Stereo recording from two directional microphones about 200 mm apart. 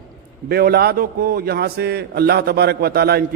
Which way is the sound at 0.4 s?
50° right (ahead or behind).